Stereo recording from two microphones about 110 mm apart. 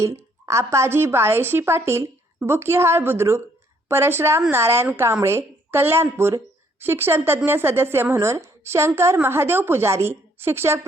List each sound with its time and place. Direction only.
0.0 s speech: 25° right (ahead or behind)